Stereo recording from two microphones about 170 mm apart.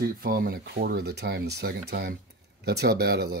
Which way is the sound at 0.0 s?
60° right (ahead or behind).